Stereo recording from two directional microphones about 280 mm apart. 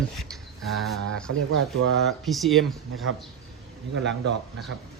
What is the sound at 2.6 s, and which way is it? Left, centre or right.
Speech, right.